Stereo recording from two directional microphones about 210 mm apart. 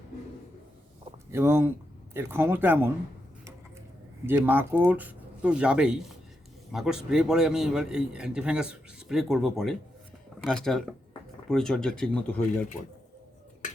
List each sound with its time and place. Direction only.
1.3 s speech: 10° right (ahead or behind)
4.3 s a man's voice: 10° right (ahead or behind); by 12.6 s 5° left (ahead or behind)